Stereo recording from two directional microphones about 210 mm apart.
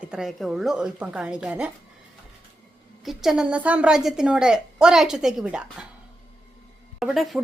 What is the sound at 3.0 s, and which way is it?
A woman's voice, centre (ahead or behind).